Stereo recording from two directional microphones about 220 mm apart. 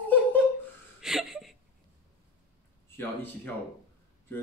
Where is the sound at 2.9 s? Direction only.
10° left (ahead or behind).